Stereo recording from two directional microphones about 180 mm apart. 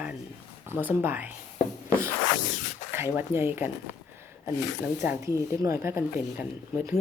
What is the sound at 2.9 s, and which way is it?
Speech, 15° right (ahead or behind).